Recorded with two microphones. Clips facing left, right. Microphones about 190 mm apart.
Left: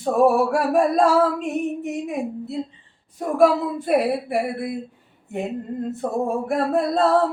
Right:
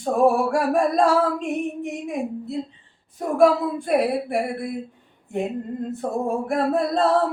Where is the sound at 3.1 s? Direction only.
Centre (ahead or behind).